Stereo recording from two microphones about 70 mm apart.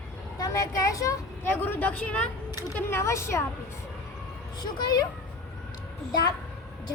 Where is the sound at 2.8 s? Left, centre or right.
Left.